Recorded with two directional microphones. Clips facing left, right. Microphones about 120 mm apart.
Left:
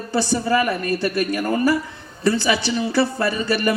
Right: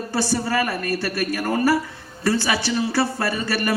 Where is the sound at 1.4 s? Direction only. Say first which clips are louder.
Right 1 dB; 30° right (ahead or behind).